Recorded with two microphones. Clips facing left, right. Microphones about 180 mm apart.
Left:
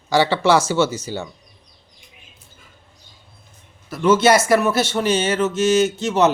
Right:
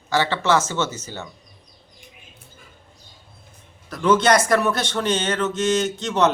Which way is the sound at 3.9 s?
5° left (ahead or behind).